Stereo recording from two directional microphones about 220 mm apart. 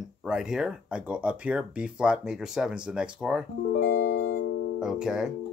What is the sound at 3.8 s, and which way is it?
Music, 45° left (ahead or behind).